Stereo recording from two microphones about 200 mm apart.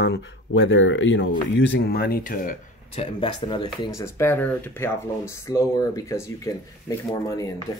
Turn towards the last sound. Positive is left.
turn(degrees=15)  # may be behind; listen again after turning